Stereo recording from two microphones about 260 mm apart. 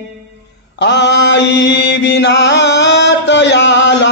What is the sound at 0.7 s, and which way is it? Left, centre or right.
Mantra, left.